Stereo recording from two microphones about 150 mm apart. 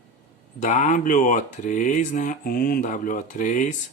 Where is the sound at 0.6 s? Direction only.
55° left (ahead or behind).